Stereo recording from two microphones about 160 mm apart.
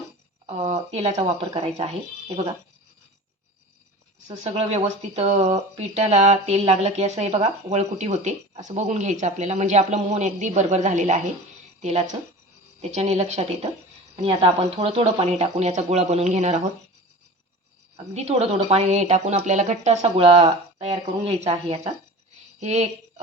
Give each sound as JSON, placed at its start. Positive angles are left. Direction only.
{"t": 0.4, "sound": "speech", "side_deg": -45}
{"t": 4.4, "sound": "speech", "side_deg": -40}
{"t": 17.9, "sound": "speech", "side_deg": -40}